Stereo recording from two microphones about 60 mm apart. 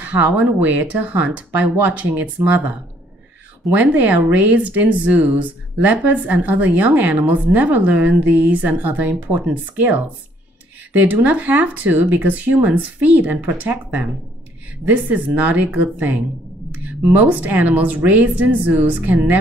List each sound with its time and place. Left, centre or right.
0.0 s speech: right
3.7 s speech: right
11.0 s speech: right